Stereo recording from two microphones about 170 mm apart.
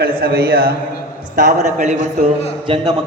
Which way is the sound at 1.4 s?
45° right (ahead or behind).